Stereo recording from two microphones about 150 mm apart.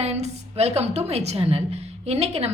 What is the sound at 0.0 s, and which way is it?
A woman's voice, 45° right (ahead or behind).